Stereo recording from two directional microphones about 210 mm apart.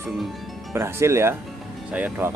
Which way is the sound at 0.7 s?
10° right (ahead or behind).